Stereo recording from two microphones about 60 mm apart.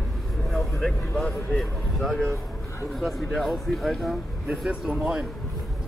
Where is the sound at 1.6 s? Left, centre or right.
Centre.